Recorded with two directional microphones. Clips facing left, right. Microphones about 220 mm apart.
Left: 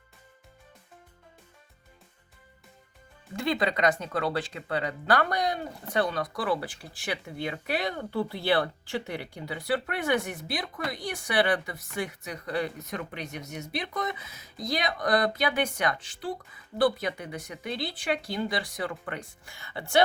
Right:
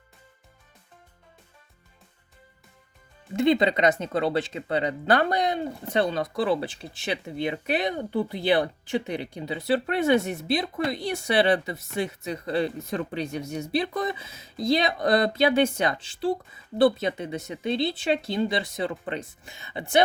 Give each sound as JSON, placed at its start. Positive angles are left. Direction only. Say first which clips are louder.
{"t": 3.3, "sound": "speech", "louder": "right 7 dB", "side_deg": -20}